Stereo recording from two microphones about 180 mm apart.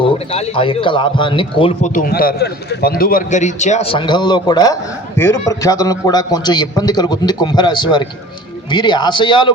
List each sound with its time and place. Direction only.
0.0 s a man's voice: 35° left (ahead or behind)
1.8 s a man's voice: 50° left (ahead or behind)
3.9 s a man's voice: 25° left (ahead or behind)